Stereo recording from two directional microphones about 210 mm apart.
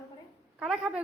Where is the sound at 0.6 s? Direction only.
5° right (ahead or behind).